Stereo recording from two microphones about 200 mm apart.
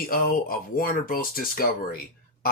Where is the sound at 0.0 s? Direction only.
45° left (ahead or behind).